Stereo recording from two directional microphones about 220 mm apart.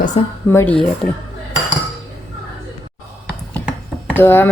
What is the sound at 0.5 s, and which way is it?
Speech, 5° left (ahead or behind).